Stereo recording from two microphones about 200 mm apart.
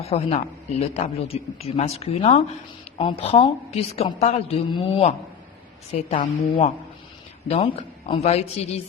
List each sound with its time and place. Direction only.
0.0 s a man's voice: 30° left (ahead or behind)